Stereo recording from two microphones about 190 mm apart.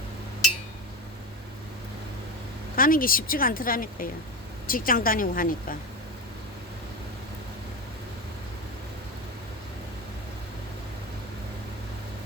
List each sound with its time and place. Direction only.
2.7 s a woman's voice: 50° left (ahead or behind)